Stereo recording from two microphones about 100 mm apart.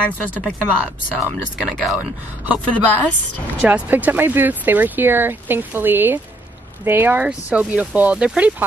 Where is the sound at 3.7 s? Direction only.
15° right (ahead or behind).